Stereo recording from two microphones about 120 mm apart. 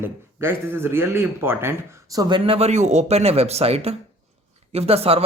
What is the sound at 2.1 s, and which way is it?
Speech, 40° right (ahead or behind).